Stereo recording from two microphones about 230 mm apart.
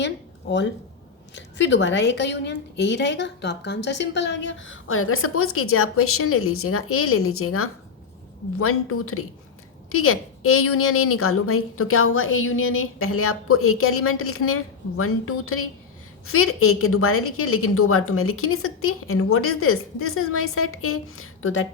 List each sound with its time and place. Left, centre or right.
1.3 s a woman's voice: left